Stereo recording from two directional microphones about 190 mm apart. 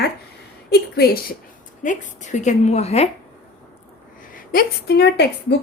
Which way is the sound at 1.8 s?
40° left (ahead or behind).